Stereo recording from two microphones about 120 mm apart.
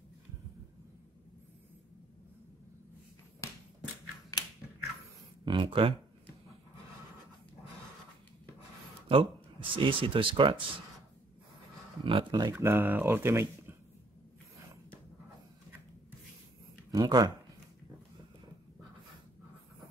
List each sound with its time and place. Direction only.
5.4 s speech: 40° right (ahead or behind)
9.1 s speech: 50° right (ahead or behind)
12.0 s speech: 45° right (ahead or behind)
12.5 s speech: 15° right (ahead or behind)
16.9 s speech: 35° right (ahead or behind)